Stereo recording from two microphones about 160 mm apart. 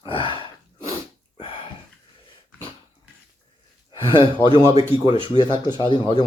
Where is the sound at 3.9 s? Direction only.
30° left (ahead or behind).